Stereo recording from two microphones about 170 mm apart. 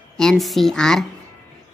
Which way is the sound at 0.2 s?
Centre (ahead or behind).